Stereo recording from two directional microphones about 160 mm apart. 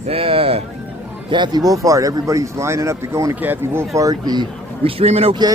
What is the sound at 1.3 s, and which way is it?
Speech, 25° right (ahead or behind).